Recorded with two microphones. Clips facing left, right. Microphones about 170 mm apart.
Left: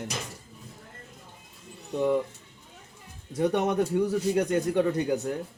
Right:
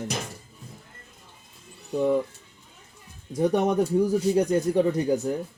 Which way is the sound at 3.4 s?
35° right (ahead or behind).